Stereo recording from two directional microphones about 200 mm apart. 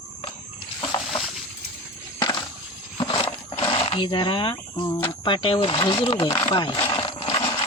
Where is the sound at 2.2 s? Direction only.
20° left (ahead or behind).